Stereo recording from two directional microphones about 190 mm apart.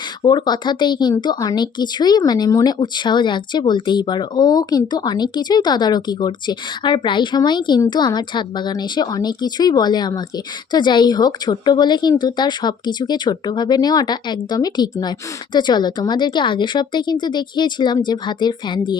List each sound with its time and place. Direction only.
0.2 s speech: 25° left (ahead or behind)